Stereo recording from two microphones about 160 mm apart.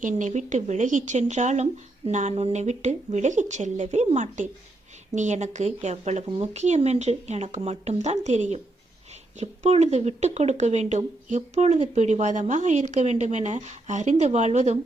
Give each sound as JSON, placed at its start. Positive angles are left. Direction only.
{"t": 0.0, "sound": "speech", "side_deg": -50}